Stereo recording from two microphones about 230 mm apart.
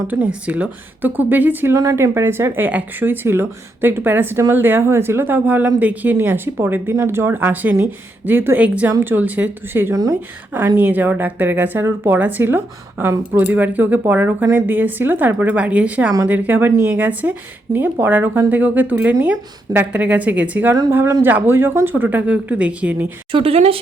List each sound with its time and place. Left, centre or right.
0.1 s speech: centre
23.3 s speech: right